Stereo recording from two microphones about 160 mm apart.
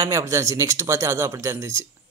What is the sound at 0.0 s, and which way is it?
A man's voice, 20° right (ahead or behind).